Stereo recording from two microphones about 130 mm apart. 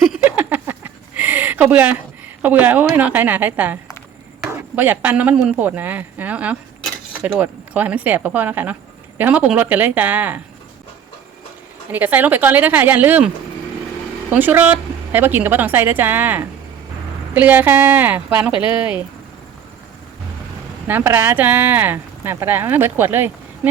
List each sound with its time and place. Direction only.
0.0 s a sound: 10° right (ahead or behind)
2.4 s speech: 15° right (ahead or behind)
11.9 s speech: 15° right (ahead or behind)
20.8 s speech: 15° right (ahead or behind)